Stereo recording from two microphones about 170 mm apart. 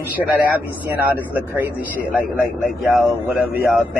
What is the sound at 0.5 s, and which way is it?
A man's voice, 10° right (ahead or behind).